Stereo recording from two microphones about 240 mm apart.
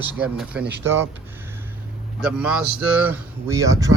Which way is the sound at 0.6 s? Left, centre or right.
Right.